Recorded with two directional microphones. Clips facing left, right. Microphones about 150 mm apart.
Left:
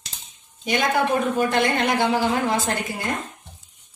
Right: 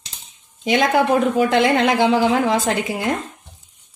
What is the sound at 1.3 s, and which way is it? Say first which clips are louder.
A woman's voice: right 5 dB; 90° right.